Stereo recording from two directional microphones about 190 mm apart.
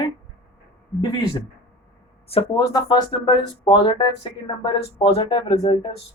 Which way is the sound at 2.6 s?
20° left (ahead or behind).